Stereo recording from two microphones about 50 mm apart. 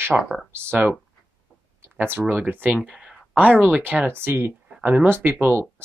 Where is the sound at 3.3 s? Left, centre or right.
Right.